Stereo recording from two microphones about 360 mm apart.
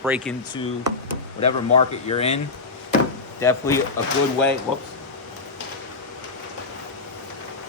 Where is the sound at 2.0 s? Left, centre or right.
Centre.